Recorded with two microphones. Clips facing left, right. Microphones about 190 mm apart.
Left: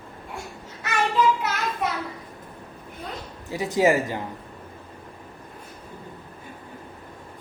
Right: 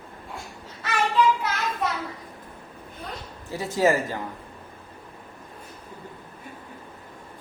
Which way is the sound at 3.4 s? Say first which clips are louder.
Left 2 dB; 15° left (ahead or behind).